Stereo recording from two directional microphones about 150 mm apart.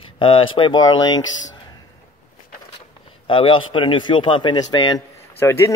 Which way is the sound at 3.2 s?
35° left (ahead or behind).